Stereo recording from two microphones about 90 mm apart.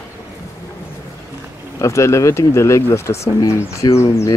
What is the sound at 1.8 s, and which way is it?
Speech, 35° left (ahead or behind).